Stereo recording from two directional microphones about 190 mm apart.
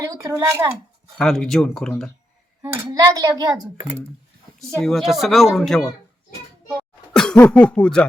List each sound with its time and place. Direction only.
0.1 s speech: 15° right (ahead or behind)
1.1 s speech: centre (ahead or behind)
2.6 s speech: 20° right (ahead or behind)
4.8 s speech: centre (ahead or behind)
7.1 s cough: 5° left (ahead or behind)